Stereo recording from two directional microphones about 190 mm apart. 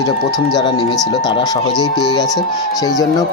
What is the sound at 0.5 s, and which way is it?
Speech, 20° left (ahead or behind).